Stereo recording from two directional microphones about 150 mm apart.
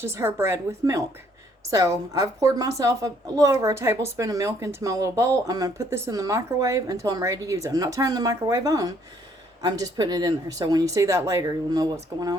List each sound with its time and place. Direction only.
0.0 s a woman's voice: 15° right (ahead or behind)